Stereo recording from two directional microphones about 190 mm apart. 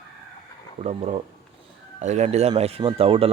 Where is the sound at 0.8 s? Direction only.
35° right (ahead or behind).